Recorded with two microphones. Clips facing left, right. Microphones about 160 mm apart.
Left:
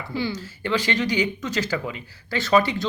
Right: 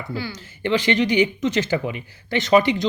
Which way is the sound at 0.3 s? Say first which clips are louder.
Right 3 dB; 20° right (ahead or behind).